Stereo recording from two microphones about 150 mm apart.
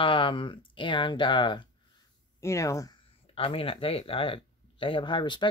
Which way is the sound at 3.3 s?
35° left (ahead or behind).